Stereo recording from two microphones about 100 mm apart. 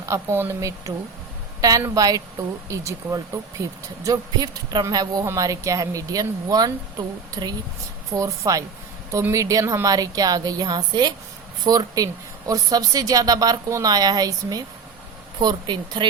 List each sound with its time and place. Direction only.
0.0 s a woman's voice: 30° right (ahead or behind); by 16.0 s 50° right (ahead or behind)